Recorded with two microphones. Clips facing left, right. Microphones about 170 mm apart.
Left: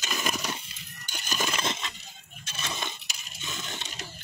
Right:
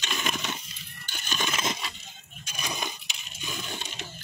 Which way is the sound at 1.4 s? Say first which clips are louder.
Right 1 dB; 5° right (ahead or behind).